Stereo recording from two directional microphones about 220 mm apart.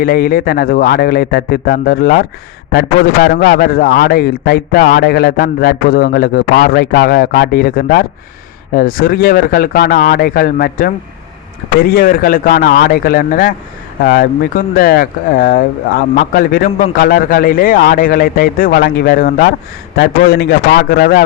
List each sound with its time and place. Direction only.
0.0 s a man's voice: 40° left (ahead or behind)